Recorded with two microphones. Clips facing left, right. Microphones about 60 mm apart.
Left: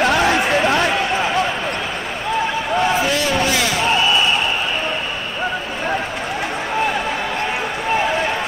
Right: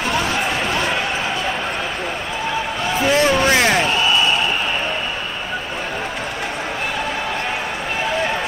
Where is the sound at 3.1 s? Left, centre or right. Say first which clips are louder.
Right 3 dB; right.